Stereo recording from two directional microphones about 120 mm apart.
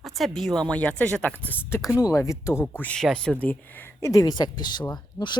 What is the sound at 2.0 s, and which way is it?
Speech, 25° left (ahead or behind).